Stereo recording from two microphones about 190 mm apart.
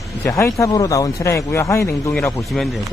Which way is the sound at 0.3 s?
15° left (ahead or behind).